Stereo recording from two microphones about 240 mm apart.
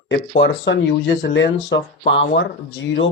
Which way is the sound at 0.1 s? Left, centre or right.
Left.